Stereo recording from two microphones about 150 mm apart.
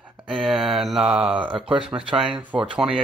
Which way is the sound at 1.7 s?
35° right (ahead or behind).